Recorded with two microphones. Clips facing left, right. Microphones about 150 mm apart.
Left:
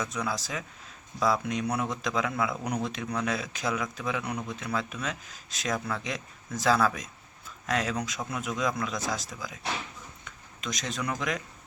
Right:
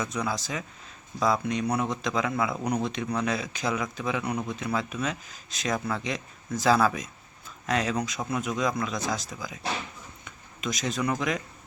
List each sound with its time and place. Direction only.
0.0 s speech: centre (ahead or behind)